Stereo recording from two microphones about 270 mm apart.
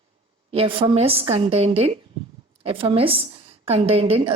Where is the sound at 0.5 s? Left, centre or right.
Centre.